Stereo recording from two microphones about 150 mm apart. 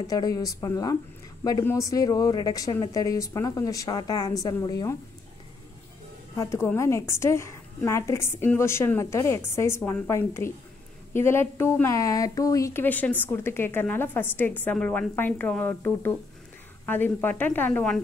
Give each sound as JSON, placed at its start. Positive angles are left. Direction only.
{"t": 0.0, "sound": "speech", "side_deg": 25}
{"t": 6.3, "sound": "a woman's voice", "side_deg": 20}